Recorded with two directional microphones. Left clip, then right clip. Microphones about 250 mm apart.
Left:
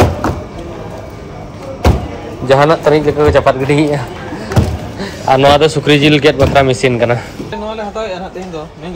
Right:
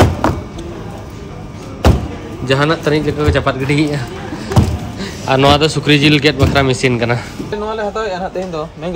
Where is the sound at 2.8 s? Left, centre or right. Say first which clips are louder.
Left 6 dB; centre.